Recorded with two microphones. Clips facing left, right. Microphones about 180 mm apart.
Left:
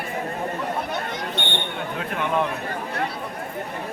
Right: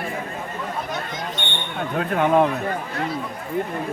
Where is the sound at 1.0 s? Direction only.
60° left (ahead or behind).